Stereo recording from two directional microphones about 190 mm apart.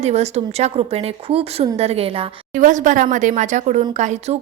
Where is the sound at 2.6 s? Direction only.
40° right (ahead or behind).